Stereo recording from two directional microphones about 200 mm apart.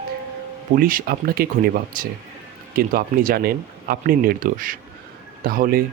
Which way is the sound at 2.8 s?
45° right (ahead or behind).